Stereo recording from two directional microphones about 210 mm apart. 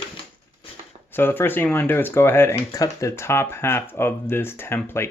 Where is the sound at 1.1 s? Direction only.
10° left (ahead or behind).